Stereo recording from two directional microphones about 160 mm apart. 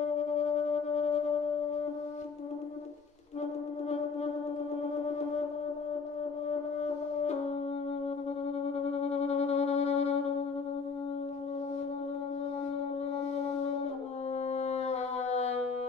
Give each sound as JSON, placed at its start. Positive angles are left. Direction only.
{"t": 6.5, "sound": "french horn", "side_deg": 45}
{"t": 8.8, "sound": "music", "side_deg": 40}
{"t": 14.5, "sound": "music", "side_deg": 45}